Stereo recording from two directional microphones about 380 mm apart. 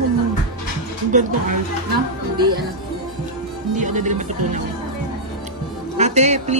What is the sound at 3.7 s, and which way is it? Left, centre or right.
Music, centre.